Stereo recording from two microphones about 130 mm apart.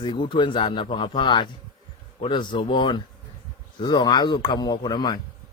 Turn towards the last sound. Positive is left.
turn(degrees=35)  # may be behind; listen again after turning